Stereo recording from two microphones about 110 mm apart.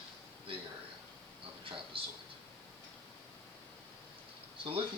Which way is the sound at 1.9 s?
55° right (ahead or behind).